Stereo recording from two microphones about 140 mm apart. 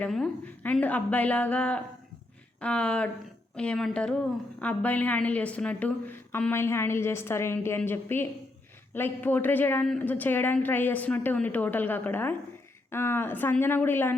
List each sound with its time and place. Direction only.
0.0 s a woman's voice: 5° left (ahead or behind)